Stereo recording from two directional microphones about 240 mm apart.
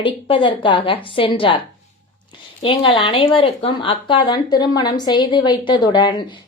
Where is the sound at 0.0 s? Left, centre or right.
Left.